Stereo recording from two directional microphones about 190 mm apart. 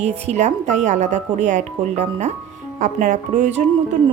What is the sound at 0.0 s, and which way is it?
Speech, 35° right (ahead or behind).